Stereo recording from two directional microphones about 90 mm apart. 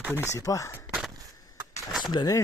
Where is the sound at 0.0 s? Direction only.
20° right (ahead or behind).